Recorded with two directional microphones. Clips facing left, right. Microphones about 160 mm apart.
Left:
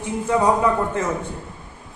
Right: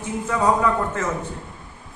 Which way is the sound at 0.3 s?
20° left (ahead or behind).